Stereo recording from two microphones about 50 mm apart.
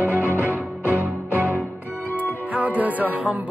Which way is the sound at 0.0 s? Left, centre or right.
Right.